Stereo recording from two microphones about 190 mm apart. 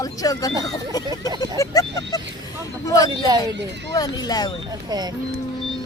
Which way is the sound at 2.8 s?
20° left (ahead or behind).